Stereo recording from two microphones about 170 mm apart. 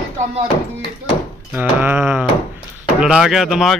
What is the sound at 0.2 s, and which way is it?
Speech, 40° right (ahead or behind).